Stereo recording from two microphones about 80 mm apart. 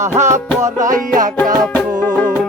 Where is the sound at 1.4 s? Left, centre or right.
Centre.